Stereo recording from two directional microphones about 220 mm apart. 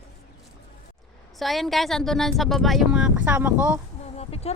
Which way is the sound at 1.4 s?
Centre (ahead or behind).